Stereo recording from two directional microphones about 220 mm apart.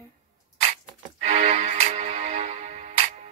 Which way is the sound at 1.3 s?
30° right (ahead or behind).